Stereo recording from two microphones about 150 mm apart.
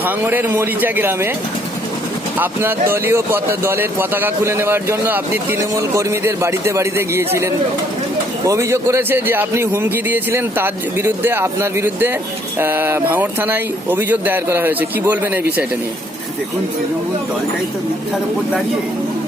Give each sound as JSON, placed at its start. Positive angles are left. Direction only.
{"t": 0.0, "sound": "speech", "side_deg": -15}
{"t": 2.4, "sound": "speech", "side_deg": -15}
{"t": 8.4, "sound": "speech", "side_deg": -20}